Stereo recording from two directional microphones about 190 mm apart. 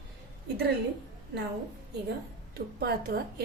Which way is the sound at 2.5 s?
55° right (ahead or behind).